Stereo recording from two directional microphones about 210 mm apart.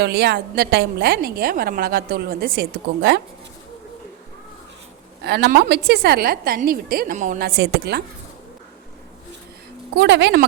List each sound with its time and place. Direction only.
0.0 s a woman's voice: 50° right (ahead or behind)
5.2 s a woman's voice: 50° right (ahead or behind)
9.9 s a woman's voice: 55° right (ahead or behind)